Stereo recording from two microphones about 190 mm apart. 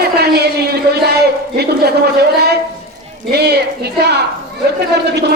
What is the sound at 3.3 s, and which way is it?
Speech, 60° right (ahead or behind).